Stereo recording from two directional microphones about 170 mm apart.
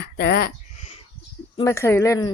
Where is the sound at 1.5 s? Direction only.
20° left (ahead or behind).